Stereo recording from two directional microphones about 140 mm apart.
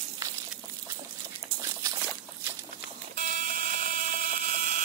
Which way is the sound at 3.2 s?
65° right (ahead or behind).